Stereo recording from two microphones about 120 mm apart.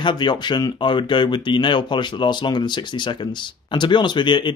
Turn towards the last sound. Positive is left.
turn(degrees=40)  # may be behind; listen again after turning